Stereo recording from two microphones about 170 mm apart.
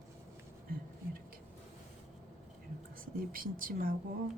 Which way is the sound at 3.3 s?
55° right (ahead or behind).